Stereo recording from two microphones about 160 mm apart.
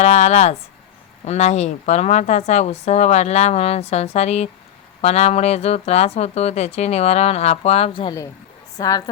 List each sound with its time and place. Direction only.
0.0 s speech: 45° left (ahead or behind)
8.8 s a woman's voice: 25° left (ahead or behind)